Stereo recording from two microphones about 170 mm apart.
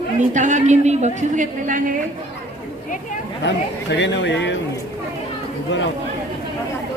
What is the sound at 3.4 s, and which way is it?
Speech, 90° left.